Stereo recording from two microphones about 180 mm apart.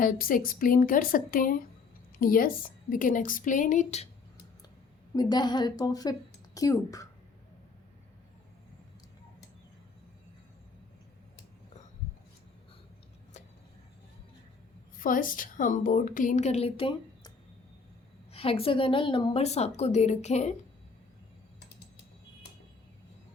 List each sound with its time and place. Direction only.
0.0 s a woman's voice: 50° left (ahead or behind)
5.1 s a woman's voice: 20° left (ahead or behind)
14.9 s a woman's voice: 50° left (ahead or behind)